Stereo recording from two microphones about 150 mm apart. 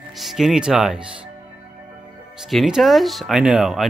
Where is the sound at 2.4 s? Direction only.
Centre (ahead or behind).